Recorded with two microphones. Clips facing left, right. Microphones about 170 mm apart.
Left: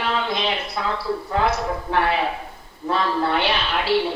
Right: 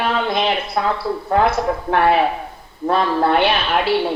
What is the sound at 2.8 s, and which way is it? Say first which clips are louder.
Speech: right 5 dB; 55° right (ahead or behind).